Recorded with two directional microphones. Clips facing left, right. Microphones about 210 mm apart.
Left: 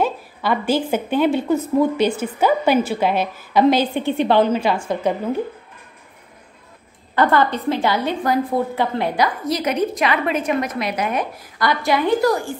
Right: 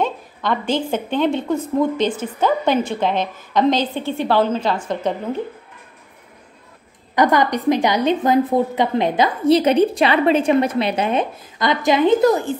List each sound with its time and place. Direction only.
0.0 s a woman's voice: 5° left (ahead or behind)
7.2 s a woman's voice: 15° right (ahead or behind)